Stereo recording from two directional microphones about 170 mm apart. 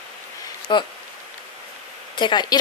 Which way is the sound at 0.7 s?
25° left (ahead or behind).